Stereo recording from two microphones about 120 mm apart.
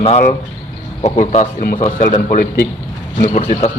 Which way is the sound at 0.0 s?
75° left (ahead or behind).